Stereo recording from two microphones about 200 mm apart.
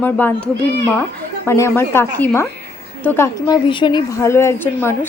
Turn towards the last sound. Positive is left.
turn(degrees=10)  # may be behind; listen again after turning